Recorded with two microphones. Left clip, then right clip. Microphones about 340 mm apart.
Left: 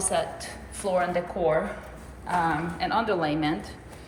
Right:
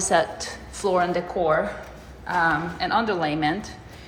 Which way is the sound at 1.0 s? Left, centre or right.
Centre.